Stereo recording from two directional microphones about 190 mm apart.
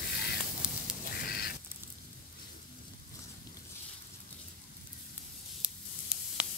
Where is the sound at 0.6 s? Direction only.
5° right (ahead or behind).